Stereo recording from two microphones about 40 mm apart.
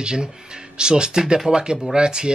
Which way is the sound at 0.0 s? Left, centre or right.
Right.